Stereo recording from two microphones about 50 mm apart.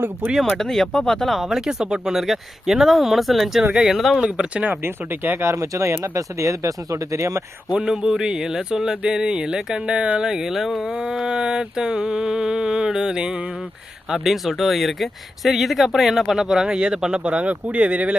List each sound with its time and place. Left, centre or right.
0.3 s speech: centre
3.7 s speech: centre
4.8 s speech: right
5.5 s speech: right
7.8 s speech: centre
10.9 s speech: centre
14.1 s speech: centre; by 18.1 s right